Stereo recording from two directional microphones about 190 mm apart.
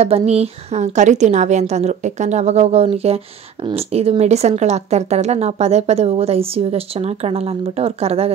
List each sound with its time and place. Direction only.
0.0 s speech: 35° right (ahead or behind)